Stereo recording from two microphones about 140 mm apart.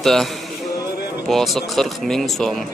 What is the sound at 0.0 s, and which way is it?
Speech, centre (ahead or behind).